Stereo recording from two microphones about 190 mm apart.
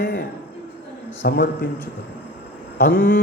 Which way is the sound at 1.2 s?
55° left (ahead or behind).